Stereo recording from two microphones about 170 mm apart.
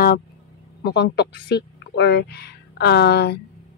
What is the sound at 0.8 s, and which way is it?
Speech, 75° left (ahead or behind).